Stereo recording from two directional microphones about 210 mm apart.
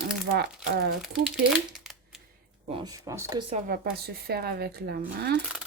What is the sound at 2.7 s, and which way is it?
Speech, 15° right (ahead or behind).